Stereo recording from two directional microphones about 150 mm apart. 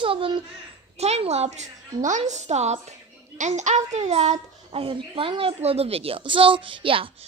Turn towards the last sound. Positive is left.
turn(degrees=-35)  # may be behind; listen again after turning